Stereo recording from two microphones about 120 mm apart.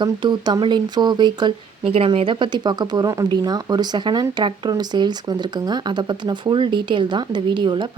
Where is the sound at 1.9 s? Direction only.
50° right (ahead or behind).